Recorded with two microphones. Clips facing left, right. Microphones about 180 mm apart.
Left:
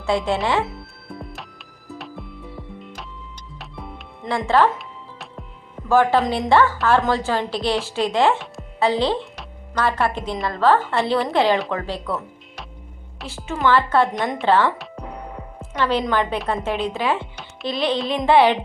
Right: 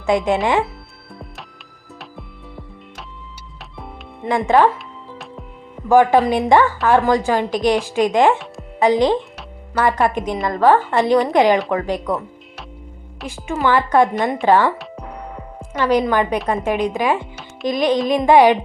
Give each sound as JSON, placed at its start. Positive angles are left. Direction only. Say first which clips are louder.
{"t": 0.0, "sound": "a woman's voice", "louder": "right 4 dB", "side_deg": -15}
{"t": 0.7, "sound": "music", "louder": "left 3 dB", "side_deg": 0}
{"t": 3.6, "sound": "music", "louder": "right 1 dB", "side_deg": 0}
{"t": 4.3, "sound": "a woman's voice", "louder": "right 3 dB", "side_deg": -15}
{"t": 5.9, "sound": "a woman's voice", "louder": "right 4 dB", "side_deg": -15}
{"t": 13.2, "sound": "a woman's voice", "louder": "right 2 dB", "side_deg": -15}
{"t": 14.2, "sound": "a woman's voice", "louder": "right 4 dB", "side_deg": 0}
{"t": 14.4, "sound": "a woman's voice", "louder": "right 3 dB", "side_deg": -10}
{"t": 15.7, "sound": "a woman's voice", "louder": "right 4 dB", "side_deg": -10}